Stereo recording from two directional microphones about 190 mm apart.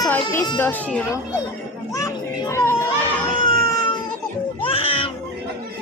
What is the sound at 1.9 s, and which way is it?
Children playing, 15° left (ahead or behind).